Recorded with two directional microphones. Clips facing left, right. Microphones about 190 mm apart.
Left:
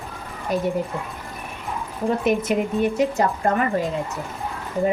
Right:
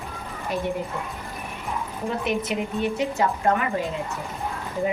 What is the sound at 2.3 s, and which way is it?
Speech, 45° left (ahead or behind).